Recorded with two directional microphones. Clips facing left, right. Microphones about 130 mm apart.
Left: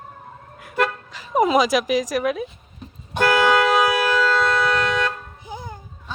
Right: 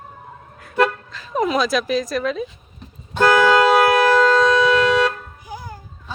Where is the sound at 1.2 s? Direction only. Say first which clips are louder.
Left 2 dB; 20° left (ahead or behind).